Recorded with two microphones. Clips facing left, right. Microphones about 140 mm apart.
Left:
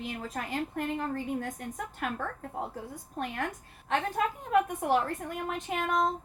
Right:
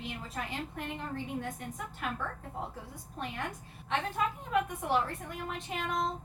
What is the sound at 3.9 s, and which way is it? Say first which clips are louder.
A woman's voice: left 3 dB; 45° left (ahead or behind).